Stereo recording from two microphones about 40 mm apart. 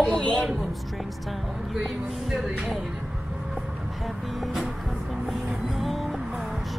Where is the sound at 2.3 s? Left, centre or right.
Centre.